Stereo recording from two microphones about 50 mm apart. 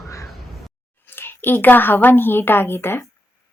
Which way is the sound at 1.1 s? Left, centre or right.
Left.